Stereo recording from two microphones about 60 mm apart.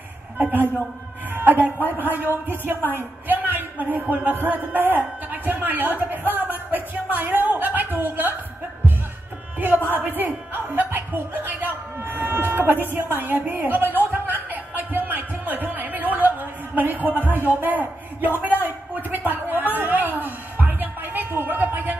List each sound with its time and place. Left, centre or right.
0.4 s speech: right
1.3 s music: right
1.9 s speech: right
9.8 s speech: right
14.2 s music: right